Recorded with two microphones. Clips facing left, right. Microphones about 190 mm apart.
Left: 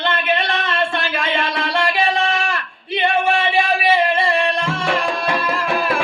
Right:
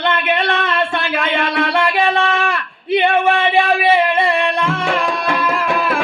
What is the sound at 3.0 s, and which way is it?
Music, 55° right (ahead or behind).